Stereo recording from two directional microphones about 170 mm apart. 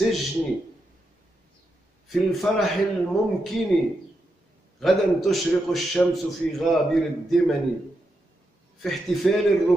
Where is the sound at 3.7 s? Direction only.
Centre (ahead or behind).